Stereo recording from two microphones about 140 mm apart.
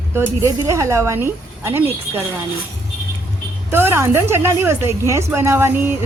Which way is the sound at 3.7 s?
15° right (ahead or behind).